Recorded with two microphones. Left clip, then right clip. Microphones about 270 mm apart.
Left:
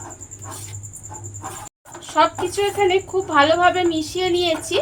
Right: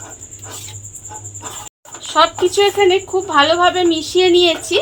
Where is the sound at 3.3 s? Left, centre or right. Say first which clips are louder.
Right 2 dB; centre.